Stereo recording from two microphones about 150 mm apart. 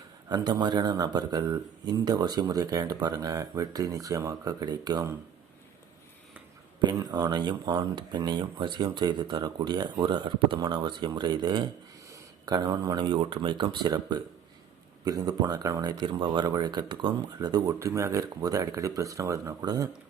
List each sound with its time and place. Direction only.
0.3 s speech: 30° right (ahead or behind)
6.7 s speech: 30° right (ahead or behind)